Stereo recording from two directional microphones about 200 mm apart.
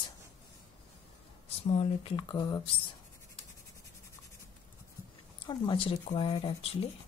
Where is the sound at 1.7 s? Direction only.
25° left (ahead or behind).